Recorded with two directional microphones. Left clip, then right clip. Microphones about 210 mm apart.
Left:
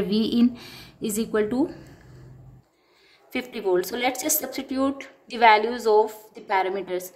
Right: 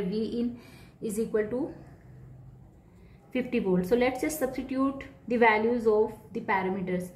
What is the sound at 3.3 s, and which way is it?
A woman's voice, 55° left (ahead or behind).